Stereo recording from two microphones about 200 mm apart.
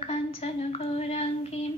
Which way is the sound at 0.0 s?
30° left (ahead or behind).